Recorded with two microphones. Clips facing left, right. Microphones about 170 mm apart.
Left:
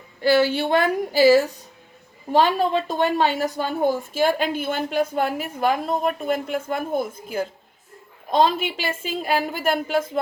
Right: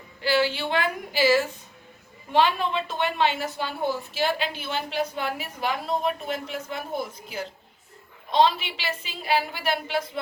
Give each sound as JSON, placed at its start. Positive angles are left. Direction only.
{"t": 0.2, "sound": "a woman's voice", "side_deg": 45}